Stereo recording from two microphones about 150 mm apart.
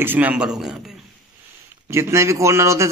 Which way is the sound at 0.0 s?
10° right (ahead or behind).